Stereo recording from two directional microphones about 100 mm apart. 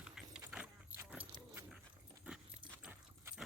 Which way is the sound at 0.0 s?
10° right (ahead or behind).